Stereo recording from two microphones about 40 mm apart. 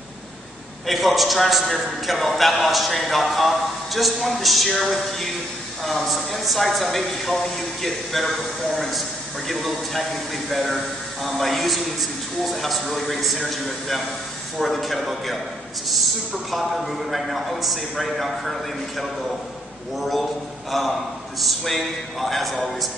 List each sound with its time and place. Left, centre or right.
0.8 s a man's voice: centre
16.4 s a man's voice: centre
21.4 s a man's voice: centre